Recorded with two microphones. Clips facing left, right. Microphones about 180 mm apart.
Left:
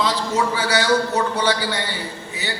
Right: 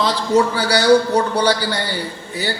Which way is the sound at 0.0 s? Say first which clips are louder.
Right 5 dB; 40° right (ahead or behind).